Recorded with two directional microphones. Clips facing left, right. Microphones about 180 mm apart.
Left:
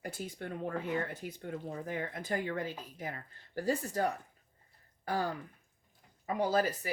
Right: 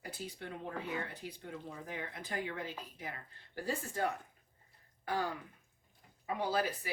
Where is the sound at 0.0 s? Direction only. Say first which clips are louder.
Left 4 dB; 50° left (ahead or behind).